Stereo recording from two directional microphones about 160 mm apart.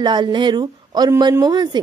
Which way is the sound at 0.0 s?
25° right (ahead or behind).